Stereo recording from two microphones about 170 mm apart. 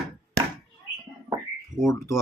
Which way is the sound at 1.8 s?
15° left (ahead or behind).